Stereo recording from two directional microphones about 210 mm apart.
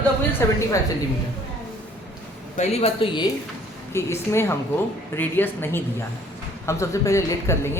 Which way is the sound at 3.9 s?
10° left (ahead or behind).